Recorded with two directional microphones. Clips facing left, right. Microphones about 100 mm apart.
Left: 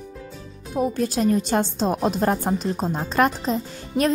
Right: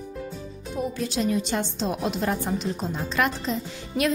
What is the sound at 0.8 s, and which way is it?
A woman's voice, 45° left (ahead or behind).